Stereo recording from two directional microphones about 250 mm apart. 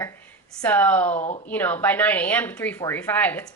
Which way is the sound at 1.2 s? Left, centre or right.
Left.